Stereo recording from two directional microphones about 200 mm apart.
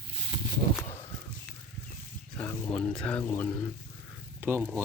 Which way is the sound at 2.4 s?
5° left (ahead or behind).